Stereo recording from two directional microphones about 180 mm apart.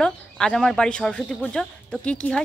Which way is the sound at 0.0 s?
5° left (ahead or behind).